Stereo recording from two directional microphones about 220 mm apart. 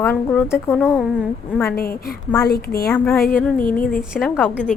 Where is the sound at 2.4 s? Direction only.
45° left (ahead or behind).